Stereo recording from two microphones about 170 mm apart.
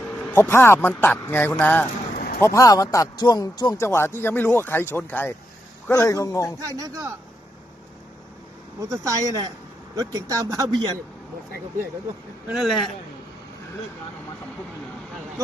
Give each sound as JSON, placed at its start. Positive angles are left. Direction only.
{"t": 0.3, "sound": "a man's voice", "side_deg": 15}
{"t": 2.1, "sound": "vehicle", "side_deg": 55}
{"t": 2.4, "sound": "a man's voice", "side_deg": 20}
{"t": 6.6, "sound": "speech", "side_deg": -20}
{"t": 8.8, "sound": "speech", "side_deg": -20}
{"t": 12.5, "sound": "a man's voice", "side_deg": 0}